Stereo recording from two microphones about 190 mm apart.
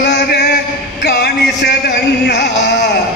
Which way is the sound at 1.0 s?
60° left (ahead or behind).